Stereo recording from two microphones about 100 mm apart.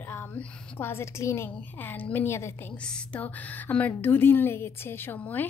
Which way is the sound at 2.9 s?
15° left (ahead or behind).